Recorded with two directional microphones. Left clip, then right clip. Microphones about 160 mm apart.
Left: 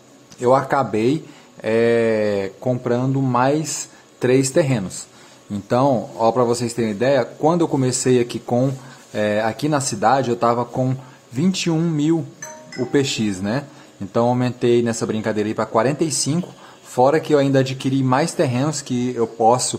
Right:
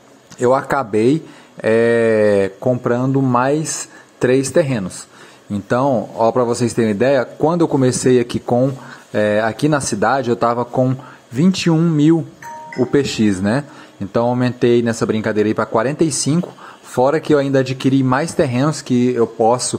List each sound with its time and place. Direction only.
0.4 s a man's voice: 30° right (ahead or behind)
11.7 s speech: 10° right (ahead or behind)
12.8 s speech: 25° right (ahead or behind)